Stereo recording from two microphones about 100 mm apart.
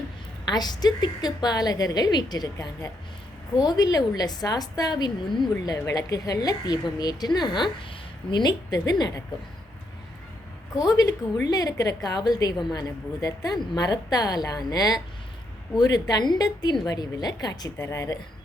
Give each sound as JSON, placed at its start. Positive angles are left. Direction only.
{"t": 0.4, "sound": "a woman's voice", "side_deg": 45}
{"t": 10.9, "sound": "a woman's voice", "side_deg": 40}